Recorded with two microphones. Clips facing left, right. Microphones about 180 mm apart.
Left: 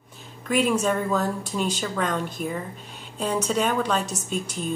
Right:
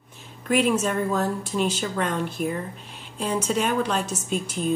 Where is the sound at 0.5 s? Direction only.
5° right (ahead or behind).